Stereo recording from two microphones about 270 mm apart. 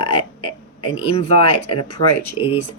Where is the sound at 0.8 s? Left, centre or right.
Centre.